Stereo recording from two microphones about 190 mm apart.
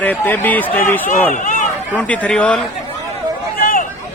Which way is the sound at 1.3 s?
40° left (ahead or behind).